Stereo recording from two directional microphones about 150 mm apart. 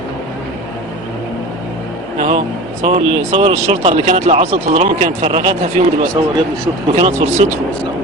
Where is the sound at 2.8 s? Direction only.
45° right (ahead or behind).